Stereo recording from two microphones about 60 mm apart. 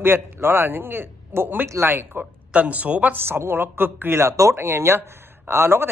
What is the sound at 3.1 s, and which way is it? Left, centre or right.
A woman's voice, right.